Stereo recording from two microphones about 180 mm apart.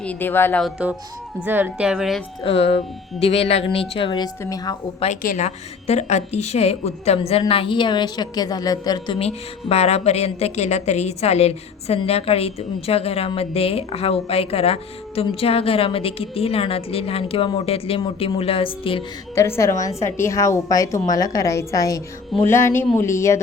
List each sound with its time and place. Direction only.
0.0 s a woman's voice: 10° left (ahead or behind)
0.6 s a woman's voice: 10° right (ahead or behind)
2.4 s a woman's voice: 30° left (ahead or behind)
5.2 s a woman's voice: 45° left (ahead or behind); by 19.0 s 30° left (ahead or behind)
19.4 s a woman's voice: 15° left (ahead or behind)